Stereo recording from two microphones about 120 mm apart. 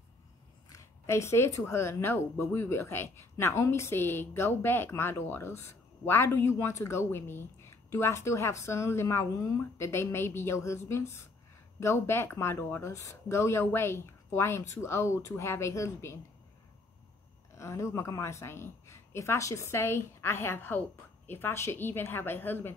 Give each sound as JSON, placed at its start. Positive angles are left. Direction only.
{"t": 0.7, "sound": "a sound", "side_deg": 25}
{"t": 1.7, "sound": "speech", "side_deg": 20}
{"t": 17.6, "sound": "speech", "side_deg": 25}